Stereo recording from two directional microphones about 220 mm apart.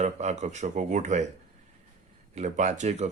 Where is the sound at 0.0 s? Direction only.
30° right (ahead or behind).